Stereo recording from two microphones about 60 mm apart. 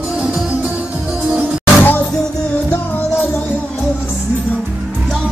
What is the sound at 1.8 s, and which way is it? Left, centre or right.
Music, left.